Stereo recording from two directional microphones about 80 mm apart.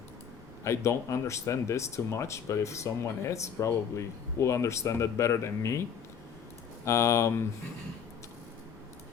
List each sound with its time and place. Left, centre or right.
0.6 s speech: left
6.8 s speech: left